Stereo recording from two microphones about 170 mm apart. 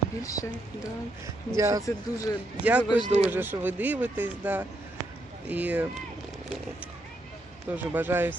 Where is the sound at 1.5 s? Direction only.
20° right (ahead or behind).